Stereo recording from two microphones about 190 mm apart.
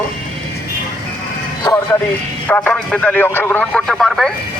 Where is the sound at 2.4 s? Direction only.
10° left (ahead or behind).